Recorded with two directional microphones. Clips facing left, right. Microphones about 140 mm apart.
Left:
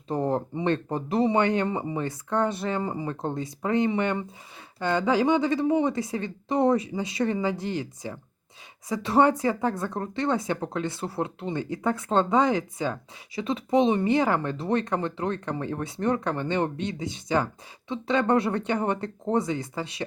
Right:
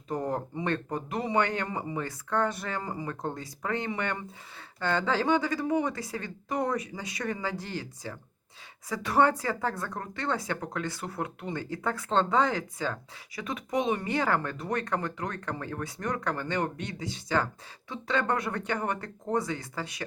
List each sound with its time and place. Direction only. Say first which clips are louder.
0.1 s speech: left 5 dB; 25° left (ahead or behind)